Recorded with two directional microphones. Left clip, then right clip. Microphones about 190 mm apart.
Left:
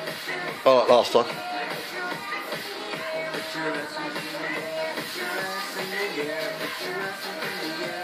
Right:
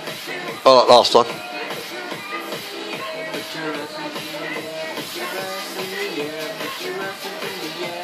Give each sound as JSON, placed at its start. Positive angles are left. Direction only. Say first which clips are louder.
{"t": 0.7, "sound": "a man's voice", "louder": "right 7 dB", "side_deg": -25}